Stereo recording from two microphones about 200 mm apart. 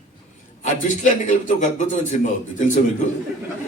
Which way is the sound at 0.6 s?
40° left (ahead or behind).